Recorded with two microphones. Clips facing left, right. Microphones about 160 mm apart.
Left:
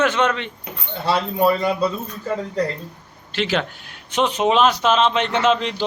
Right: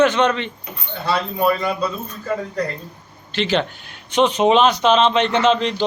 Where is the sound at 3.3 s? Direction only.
5° left (ahead or behind).